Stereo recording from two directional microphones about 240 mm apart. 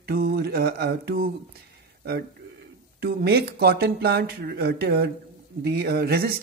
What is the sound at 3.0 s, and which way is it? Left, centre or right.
Speech, right.